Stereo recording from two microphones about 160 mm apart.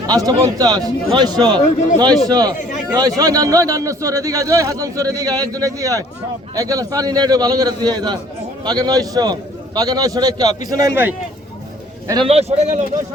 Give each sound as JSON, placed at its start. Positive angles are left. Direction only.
{"t": 0.1, "sound": "a man's voice", "side_deg": -25}
{"t": 2.6, "sound": "a sound", "side_deg": 50}
{"t": 3.2, "sound": "a man's voice", "side_deg": -20}
{"t": 12.0, "sound": "a man's voice", "side_deg": -25}
{"t": 12.3, "sound": "speech", "side_deg": -40}